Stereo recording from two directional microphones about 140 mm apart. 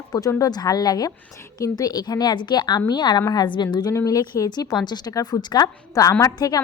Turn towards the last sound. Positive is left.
turn(degrees=25)  # may be behind; listen again after turning